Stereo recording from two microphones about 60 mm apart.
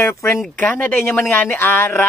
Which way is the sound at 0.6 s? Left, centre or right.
Left.